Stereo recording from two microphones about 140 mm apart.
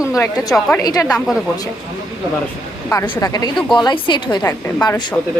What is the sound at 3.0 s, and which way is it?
A woman's voice, 30° left (ahead or behind).